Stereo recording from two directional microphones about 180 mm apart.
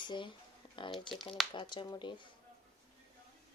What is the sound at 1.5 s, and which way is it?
Speech, 25° left (ahead or behind).